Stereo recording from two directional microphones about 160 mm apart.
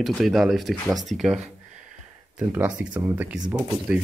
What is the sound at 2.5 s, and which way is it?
Speech, 10° right (ahead or behind).